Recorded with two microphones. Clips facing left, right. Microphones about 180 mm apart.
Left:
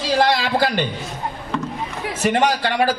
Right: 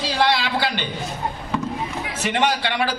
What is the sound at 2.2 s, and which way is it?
Speech, 45° left (ahead or behind).